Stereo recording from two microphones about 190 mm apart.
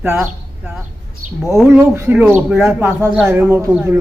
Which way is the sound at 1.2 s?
40° right (ahead or behind).